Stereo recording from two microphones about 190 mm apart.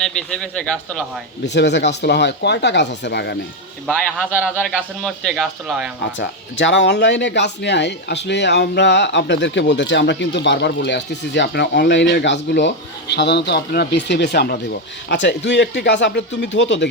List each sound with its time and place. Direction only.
0.0 s speech: 5° left (ahead or behind)
1.5 s speech: 65° left (ahead or behind)
3.8 s speech: 5° left (ahead or behind)
6.1 s speech: 75° left (ahead or behind)